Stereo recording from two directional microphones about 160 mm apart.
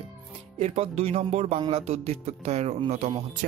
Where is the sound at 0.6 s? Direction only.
40° right (ahead or behind).